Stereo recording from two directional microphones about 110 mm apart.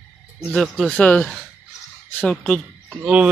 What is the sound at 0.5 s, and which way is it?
Speech, 5° left (ahead or behind).